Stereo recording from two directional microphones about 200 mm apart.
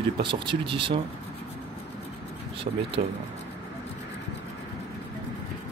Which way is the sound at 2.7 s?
35° right (ahead or behind).